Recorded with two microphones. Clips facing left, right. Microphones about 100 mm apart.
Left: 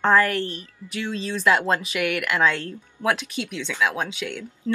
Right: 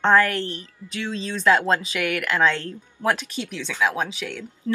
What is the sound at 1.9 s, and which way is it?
Speech, 5° left (ahead or behind).